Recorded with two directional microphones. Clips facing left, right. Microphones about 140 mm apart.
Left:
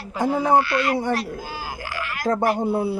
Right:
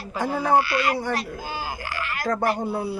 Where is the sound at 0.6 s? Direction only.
5° right (ahead or behind).